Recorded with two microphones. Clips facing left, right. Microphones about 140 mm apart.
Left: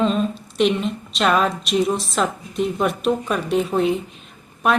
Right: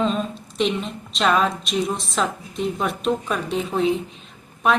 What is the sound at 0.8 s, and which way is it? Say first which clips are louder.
A woman's voice: left 2 dB; centre (ahead or behind).